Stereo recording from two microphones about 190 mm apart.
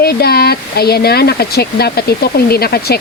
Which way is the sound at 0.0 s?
55° left (ahead or behind).